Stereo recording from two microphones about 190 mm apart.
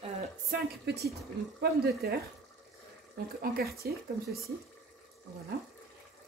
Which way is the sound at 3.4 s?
50° right (ahead or behind).